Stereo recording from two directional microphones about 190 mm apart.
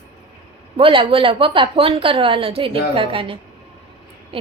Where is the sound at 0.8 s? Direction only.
30° right (ahead or behind).